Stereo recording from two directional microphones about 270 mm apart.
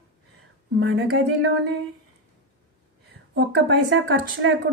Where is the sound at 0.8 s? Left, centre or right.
Right.